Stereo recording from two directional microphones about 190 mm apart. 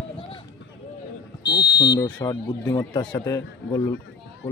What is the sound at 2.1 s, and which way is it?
Speech, 10° left (ahead or behind).